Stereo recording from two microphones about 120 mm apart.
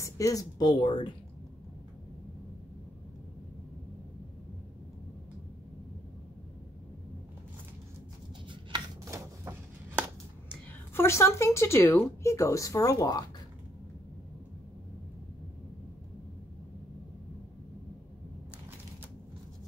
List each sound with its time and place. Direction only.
0.0 s speech: 30° left (ahead or behind)
9.0 s a sound: 25° right (ahead or behind)
11.0 s speech: 20° left (ahead or behind)